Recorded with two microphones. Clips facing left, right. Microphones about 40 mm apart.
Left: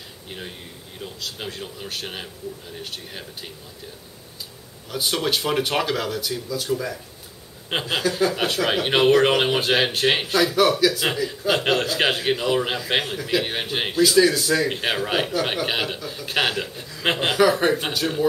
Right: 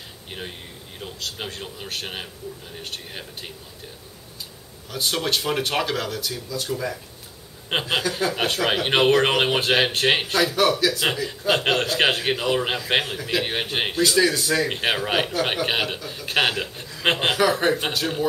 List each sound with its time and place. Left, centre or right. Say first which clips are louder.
1.0 s speech: even; centre
4.9 s speech: left 1 dB; centre
7.9 s speech: left 4 dB; centre